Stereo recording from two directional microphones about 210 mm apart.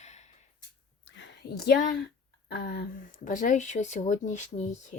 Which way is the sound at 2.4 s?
45° left (ahead or behind).